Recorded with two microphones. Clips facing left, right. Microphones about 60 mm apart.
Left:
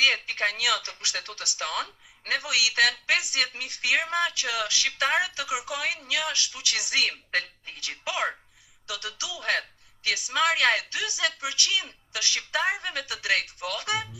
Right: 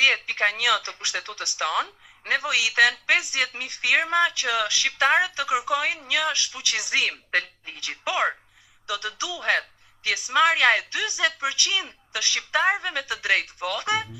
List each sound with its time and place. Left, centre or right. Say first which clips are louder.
0.0 s a woman's voice: right 3 dB; right